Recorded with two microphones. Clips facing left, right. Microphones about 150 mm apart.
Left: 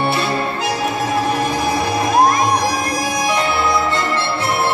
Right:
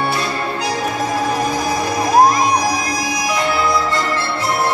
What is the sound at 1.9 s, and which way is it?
Music, 60° left (ahead or behind).